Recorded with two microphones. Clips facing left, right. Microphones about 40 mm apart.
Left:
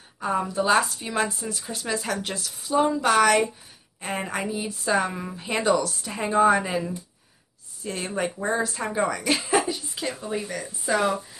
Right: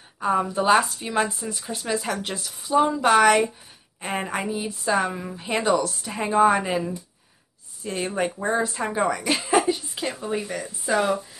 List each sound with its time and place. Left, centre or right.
0.2 s speech: centre
0.8 s speech: centre
9.7 s a sound: centre
10.9 s speech: centre